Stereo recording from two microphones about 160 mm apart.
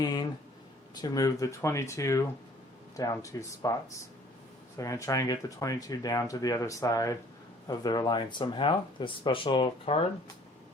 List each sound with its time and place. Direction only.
0.0 s speech: 25° left (ahead or behind)
4.8 s speech: 20° left (ahead or behind); by 10.1 s 35° left (ahead or behind)